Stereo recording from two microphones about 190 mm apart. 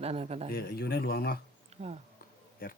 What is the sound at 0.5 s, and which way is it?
Speech, 55° left (ahead or behind).